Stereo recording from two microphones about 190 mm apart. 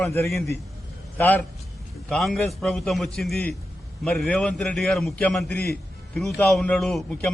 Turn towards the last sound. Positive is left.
turn(degrees=5)  # may be behind; listen again after turning